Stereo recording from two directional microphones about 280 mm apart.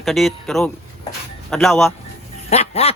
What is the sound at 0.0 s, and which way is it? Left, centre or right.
A man's voice, centre.